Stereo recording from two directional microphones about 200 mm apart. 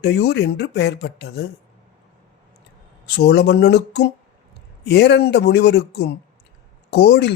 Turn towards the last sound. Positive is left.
turn(degrees=60)  # may be behind; listen again after turning